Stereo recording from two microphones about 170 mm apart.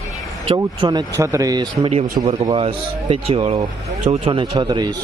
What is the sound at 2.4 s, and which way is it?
Speech, 30° right (ahead or behind).